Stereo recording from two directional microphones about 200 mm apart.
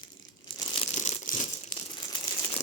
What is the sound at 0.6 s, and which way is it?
Crumpling, 30° left (ahead or behind).